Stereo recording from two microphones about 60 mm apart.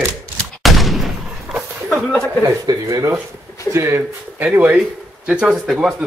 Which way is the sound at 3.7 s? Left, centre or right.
Right.